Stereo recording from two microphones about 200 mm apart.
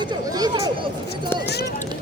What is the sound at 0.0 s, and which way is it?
Speech, 20° right (ahead or behind).